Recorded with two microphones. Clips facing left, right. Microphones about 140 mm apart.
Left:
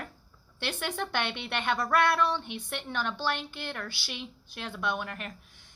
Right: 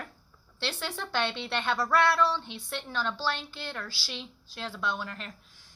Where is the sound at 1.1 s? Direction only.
15° left (ahead or behind).